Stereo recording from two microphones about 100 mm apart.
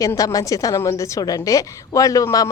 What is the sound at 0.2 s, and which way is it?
A woman's voice, 35° left (ahead or behind).